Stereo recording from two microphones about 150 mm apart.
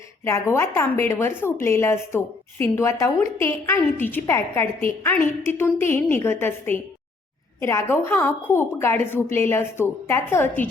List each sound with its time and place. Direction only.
0.3 s a woman's voice: 20° left (ahead or behind)